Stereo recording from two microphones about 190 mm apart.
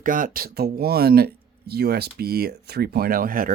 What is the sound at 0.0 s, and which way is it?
Speech, 45° right (ahead or behind).